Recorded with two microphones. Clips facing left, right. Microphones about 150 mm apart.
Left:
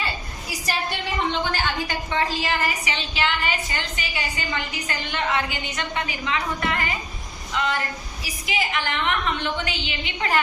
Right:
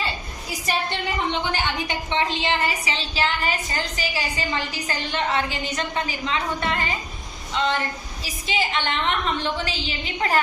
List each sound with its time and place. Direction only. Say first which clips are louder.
1.3 s a woman's voice: even; 20° right (ahead or behind); by 10.4 s 35° right (ahead or behind)